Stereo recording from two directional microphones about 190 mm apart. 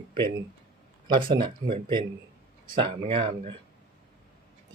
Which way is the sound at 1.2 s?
25° right (ahead or behind).